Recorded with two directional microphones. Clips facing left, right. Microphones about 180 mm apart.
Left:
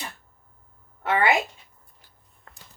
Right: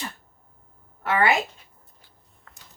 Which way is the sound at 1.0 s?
20° left (ahead or behind).